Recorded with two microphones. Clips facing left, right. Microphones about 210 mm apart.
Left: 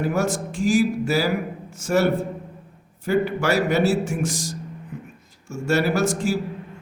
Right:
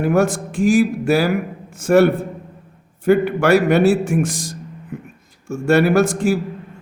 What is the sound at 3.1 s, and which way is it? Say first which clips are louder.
A man's voice: right 7 dB; 60° right (ahead or behind).